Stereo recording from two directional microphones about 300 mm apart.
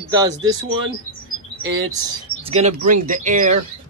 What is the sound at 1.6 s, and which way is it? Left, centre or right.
Speech, centre.